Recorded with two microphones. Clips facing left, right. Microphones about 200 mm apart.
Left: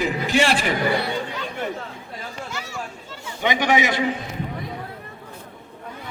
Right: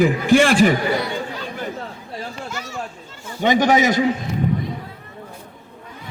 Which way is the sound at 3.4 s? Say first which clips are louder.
Right 5 dB; 45° right (ahead or behind).